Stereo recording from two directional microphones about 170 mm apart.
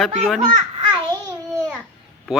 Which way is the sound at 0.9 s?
25° right (ahead or behind).